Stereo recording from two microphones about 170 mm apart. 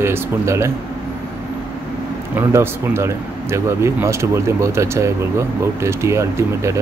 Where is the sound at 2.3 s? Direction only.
15° right (ahead or behind).